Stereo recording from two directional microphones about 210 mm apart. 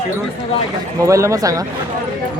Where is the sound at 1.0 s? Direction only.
15° right (ahead or behind).